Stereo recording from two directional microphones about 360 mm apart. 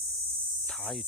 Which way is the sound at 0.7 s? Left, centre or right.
Centre.